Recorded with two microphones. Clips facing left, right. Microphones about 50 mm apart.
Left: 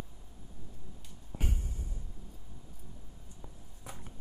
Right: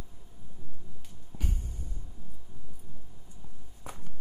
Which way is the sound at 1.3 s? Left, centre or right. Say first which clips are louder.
Left 1 dB; left.